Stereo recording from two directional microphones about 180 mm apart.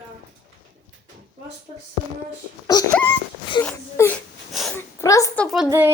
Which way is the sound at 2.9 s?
10° left (ahead or behind).